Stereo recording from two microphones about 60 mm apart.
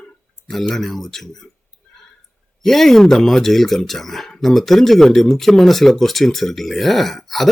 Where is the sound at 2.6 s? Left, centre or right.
Centre.